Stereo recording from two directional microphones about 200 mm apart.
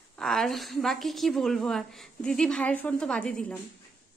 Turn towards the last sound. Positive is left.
turn(degrees=5)  # may be behind; listen again after turning